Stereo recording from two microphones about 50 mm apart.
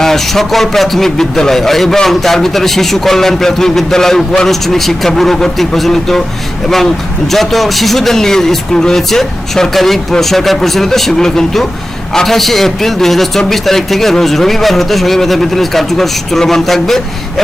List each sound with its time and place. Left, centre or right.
0.0 s a man's voice: centre
7.3 s a man's voice: centre